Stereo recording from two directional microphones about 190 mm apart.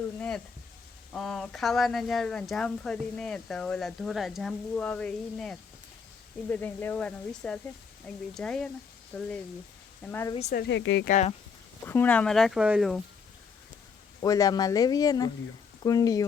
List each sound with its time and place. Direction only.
0.2 s frying: 5° left (ahead or behind)
1.1 s speech: centre (ahead or behind)
10.5 s speech: 60° left (ahead or behind)
11.0 s speech: 40° left (ahead or behind)
11.9 s speech: 10° left (ahead or behind)
14.2 s speech: 20° left (ahead or behind)